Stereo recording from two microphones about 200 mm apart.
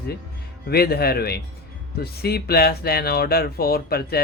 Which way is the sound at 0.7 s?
50° left (ahead or behind).